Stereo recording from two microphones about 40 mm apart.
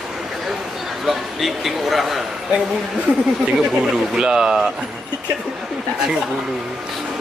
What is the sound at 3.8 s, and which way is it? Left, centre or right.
Speech, centre.